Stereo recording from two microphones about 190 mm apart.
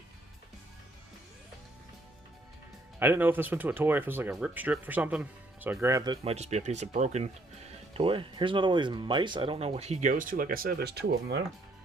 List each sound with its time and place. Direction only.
3.0 s speech: 10° right (ahead or behind)
6.3 s speech: 35° right (ahead or behind); by 11.4 s 60° right (ahead or behind)